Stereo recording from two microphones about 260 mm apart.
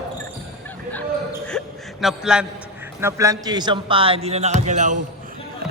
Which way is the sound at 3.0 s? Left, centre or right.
Centre.